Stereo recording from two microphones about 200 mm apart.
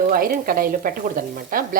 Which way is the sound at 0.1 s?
45° right (ahead or behind).